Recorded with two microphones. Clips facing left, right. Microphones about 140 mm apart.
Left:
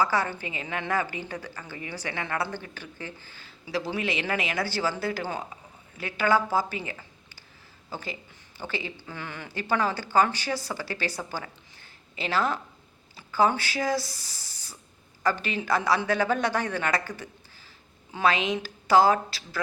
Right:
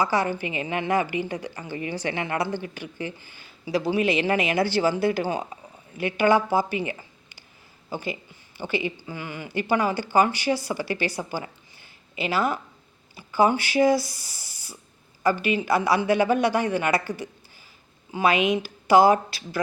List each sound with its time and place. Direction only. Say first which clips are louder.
0.0 s a woman's voice: right 3 dB; 15° right (ahead or behind)